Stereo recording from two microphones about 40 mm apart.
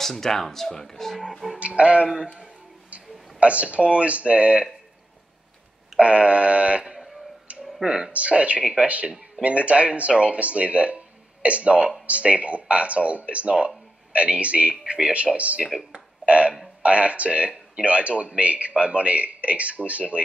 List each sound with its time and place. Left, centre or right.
0.0 s speech: centre
1.3 s music: centre
1.6 s music: right
2.9 s speech: right
5.9 s a sound: right
7.8 s speech: right
8.1 s speech: right
15.9 s a sound: right
16.8 s speech: right